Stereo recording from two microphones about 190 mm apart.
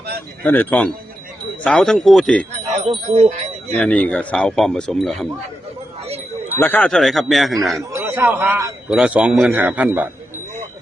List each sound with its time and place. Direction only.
0.4 s speech: 10° left (ahead or behind)
2.7 s speech: 35° right (ahead or behind)
3.8 s speech: 5° left (ahead or behind)
6.6 s speech: 10° left (ahead or behind)
7.9 s speech: 15° right (ahead or behind)